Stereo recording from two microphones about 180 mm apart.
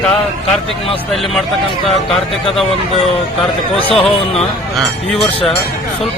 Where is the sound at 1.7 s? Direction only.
30° left (ahead or behind).